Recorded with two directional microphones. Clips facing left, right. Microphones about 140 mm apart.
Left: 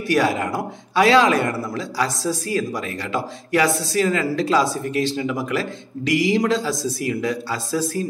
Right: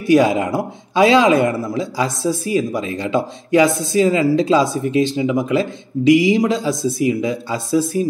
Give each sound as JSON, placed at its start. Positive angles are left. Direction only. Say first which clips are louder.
{"t": 0.0, "sound": "speech", "louder": "right 6 dB", "side_deg": -20}